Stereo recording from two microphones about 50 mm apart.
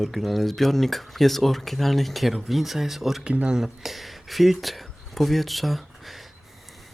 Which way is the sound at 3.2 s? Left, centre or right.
Centre.